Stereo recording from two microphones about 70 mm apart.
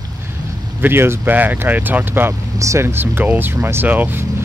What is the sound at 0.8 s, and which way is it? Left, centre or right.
Speech, right.